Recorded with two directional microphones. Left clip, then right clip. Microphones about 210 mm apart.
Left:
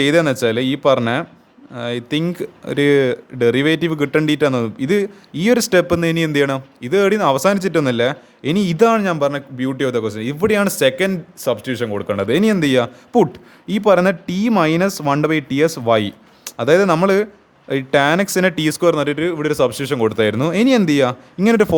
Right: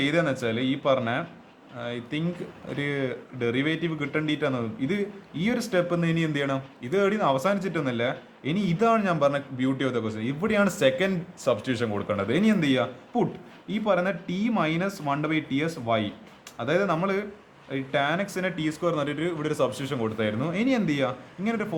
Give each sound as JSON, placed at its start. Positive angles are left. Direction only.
{"t": 0.0, "sound": "speech", "side_deg": 50}